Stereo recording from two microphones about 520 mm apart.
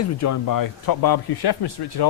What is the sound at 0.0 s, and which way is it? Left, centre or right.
Speech, left.